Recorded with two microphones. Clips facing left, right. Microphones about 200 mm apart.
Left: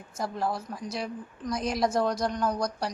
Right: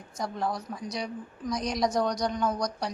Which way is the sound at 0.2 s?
Centre (ahead or behind).